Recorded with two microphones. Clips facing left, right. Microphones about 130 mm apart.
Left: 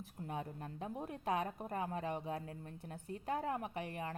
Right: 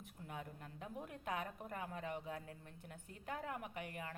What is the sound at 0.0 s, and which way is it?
Speech, 35° left (ahead or behind).